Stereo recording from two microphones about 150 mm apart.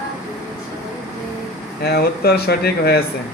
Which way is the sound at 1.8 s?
90° left.